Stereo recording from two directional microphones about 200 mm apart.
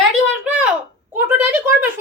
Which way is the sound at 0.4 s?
5° right (ahead or behind).